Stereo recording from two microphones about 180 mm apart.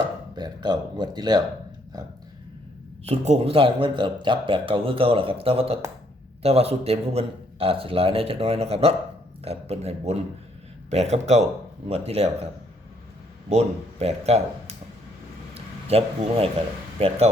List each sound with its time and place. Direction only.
0.3 s speech: 25° right (ahead or behind)
3.0 s a man's voice: 35° right (ahead or behind)
13.5 s a man's voice: 35° right (ahead or behind)
15.5 s a sound: 35° right (ahead or behind)
17.0 s a man's voice: 35° right (ahead or behind)